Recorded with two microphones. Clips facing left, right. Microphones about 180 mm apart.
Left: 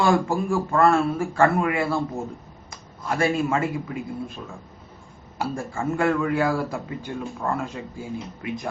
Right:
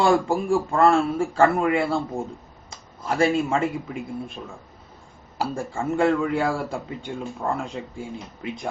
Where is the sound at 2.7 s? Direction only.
30° right (ahead or behind).